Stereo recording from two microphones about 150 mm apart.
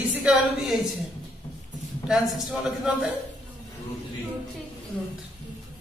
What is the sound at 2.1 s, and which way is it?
A man's voice, centre (ahead or behind).